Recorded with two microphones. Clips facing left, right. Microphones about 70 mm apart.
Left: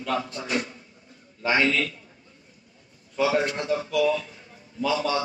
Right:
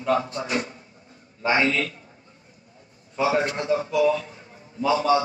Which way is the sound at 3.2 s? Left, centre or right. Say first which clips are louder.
Right 1 dB; right.